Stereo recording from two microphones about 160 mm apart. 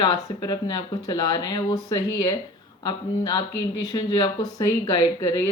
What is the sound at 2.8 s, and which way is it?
Speech, 25° left (ahead or behind).